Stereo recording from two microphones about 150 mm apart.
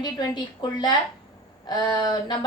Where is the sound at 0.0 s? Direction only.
30° left (ahead or behind).